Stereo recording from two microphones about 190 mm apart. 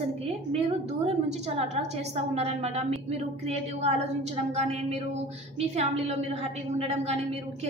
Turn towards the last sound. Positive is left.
turn(degrees=-35)  # may be behind; listen again after turning